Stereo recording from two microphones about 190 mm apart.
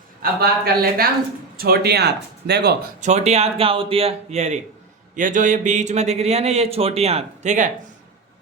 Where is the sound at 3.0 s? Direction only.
35° right (ahead or behind).